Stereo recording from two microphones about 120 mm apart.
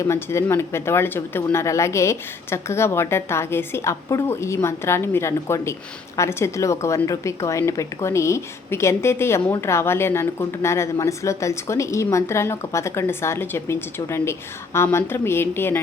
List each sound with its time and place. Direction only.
0.0 s speech: 20° left (ahead or behind)